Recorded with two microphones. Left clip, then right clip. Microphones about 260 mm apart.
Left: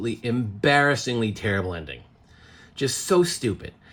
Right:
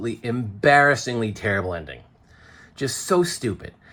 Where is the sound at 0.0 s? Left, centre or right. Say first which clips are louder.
Even; centre.